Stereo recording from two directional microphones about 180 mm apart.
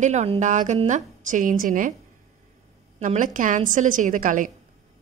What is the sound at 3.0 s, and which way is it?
A woman's voice, 45° right (ahead or behind).